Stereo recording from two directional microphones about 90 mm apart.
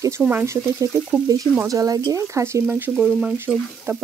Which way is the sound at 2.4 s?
30° right (ahead or behind).